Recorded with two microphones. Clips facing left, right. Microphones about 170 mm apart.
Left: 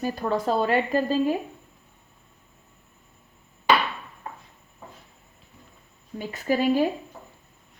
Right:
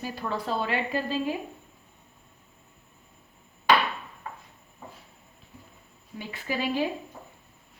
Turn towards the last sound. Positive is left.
turn(degrees=45)  # may be behind; listen again after turning